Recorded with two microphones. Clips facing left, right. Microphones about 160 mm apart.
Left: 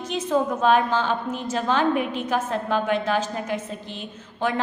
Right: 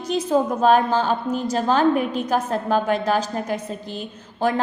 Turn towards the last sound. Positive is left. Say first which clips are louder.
# right 3 dB
turn(degrees=-40)  # may be behind; listen again after turning